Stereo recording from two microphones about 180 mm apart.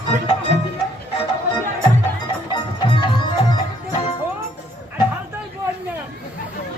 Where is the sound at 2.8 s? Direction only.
25° left (ahead or behind).